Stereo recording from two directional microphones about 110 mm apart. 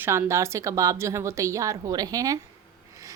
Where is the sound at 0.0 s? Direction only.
25° right (ahead or behind).